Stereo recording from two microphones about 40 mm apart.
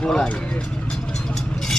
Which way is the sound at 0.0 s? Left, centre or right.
Centre.